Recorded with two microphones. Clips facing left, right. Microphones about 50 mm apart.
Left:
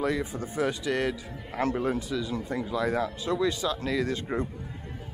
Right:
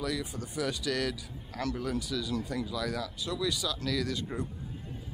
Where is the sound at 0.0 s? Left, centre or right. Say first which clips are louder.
Left 6 dB; left.